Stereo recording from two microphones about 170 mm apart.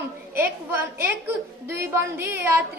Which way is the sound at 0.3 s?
15° right (ahead or behind).